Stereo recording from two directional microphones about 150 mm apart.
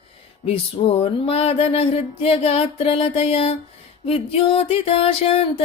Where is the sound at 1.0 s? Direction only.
40° left (ahead or behind).